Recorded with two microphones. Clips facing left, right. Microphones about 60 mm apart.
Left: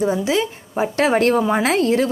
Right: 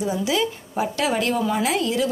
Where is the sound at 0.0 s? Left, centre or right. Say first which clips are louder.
Left 4 dB; left.